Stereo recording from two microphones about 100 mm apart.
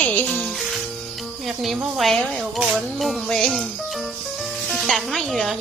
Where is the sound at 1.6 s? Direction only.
Centre (ahead or behind).